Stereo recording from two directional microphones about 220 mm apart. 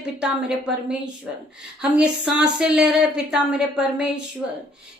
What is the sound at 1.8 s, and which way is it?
Speech, 5° right (ahead or behind).